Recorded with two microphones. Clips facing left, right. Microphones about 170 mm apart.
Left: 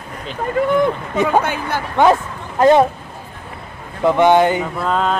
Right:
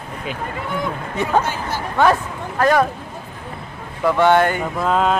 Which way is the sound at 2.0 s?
20° left (ahead or behind).